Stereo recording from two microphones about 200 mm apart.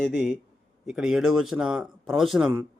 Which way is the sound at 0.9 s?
Centre (ahead or behind).